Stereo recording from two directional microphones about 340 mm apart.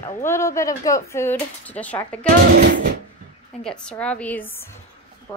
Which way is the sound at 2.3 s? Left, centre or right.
Right.